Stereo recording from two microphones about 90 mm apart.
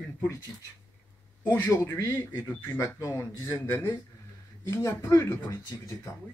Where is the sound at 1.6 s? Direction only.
35° left (ahead or behind).